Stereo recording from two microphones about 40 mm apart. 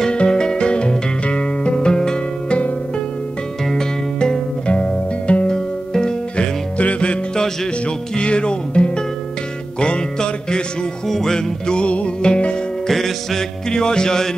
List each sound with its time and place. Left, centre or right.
0.0 s music: left
3.6 s music: centre
4.6 s music: left
6.8 s music: left
8.2 s music: left
11.1 s music: centre
11.3 s music: left
12.8 s music: centre